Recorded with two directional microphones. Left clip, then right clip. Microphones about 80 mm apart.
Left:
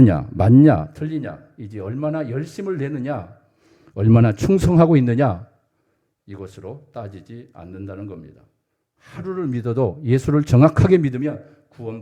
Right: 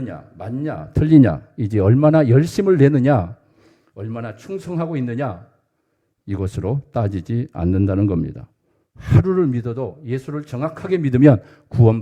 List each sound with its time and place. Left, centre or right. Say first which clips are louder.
0.0 s speech: left 14 dB; left
1.1 s speech: right 15 dB; right
3.8 s a man's voice: left 12 dB; centre
4.4 s speech: left 10 dB; left
4.7 s speech: left 7 dB; centre
6.2 s speech: right 9 dB; right
9.5 s speech: even; centre
9.7 s speech: left 6 dB; centre
11.2 s speech: right 13 dB; right